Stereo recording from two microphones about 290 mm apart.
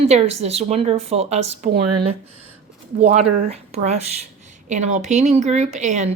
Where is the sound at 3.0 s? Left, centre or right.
Right.